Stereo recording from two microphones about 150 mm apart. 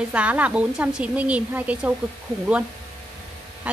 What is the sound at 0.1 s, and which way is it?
A woman's voice, 10° right (ahead or behind).